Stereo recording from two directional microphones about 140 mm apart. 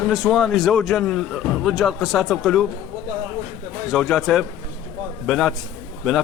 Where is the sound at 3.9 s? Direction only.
Centre (ahead or behind).